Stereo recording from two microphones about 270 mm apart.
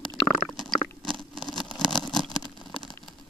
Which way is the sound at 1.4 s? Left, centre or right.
Centre.